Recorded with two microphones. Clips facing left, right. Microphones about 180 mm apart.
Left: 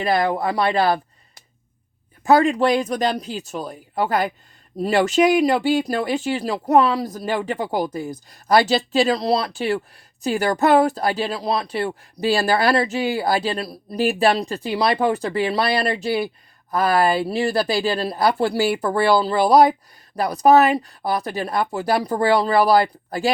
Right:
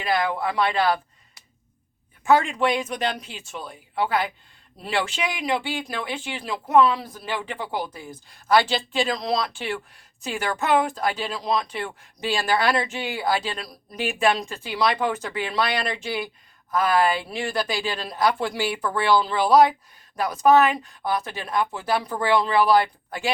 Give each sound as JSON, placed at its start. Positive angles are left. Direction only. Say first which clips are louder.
{"t": 0.0, "sound": "speech", "louder": "left 4 dB", "side_deg": 40}